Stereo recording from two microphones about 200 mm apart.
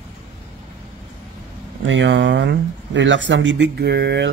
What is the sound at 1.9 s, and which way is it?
Speech, 65° right (ahead or behind).